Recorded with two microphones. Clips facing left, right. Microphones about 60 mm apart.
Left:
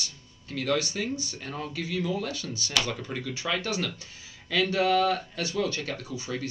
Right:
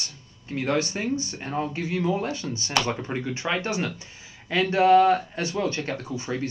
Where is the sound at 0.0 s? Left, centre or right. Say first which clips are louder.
Even; right.